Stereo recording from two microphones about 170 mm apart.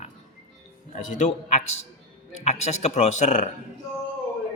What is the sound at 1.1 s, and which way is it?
A man's voice, 45° left (ahead or behind).